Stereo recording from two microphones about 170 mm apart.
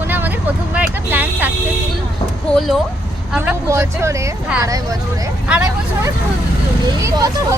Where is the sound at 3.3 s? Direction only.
10° right (ahead or behind).